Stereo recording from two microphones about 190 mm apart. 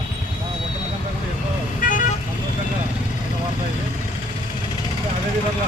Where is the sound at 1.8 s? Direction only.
45° left (ahead or behind).